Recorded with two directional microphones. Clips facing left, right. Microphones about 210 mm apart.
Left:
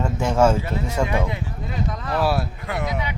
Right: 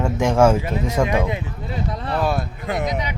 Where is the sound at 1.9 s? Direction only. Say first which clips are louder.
Right 2 dB; 30° right (ahead or behind).